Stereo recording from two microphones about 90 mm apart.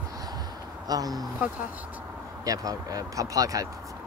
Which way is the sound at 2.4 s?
40° right (ahead or behind).